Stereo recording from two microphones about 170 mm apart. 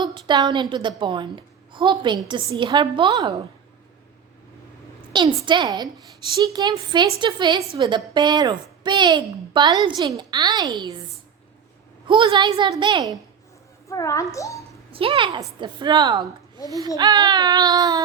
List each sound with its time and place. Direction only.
0.0 s a woman's voice: 25° right (ahead or behind)
5.1 s a woman's voice: 25° right (ahead or behind)
12.0 s a woman's voice: 30° right (ahead or behind)
13.8 s a child's voice: 20° left (ahead or behind)
14.9 s a woman's voice: 30° right (ahead or behind)